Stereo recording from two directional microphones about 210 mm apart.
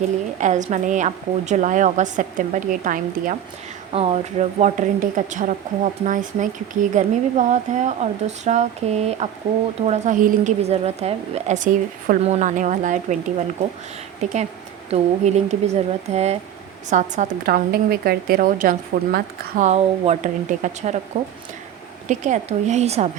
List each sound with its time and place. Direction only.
0.3 s a woman's voice: 35° right (ahead or behind)
3.9 s a woman's voice: 30° right (ahead or behind)
14.2 s a woman's voice: 35° right (ahead or behind)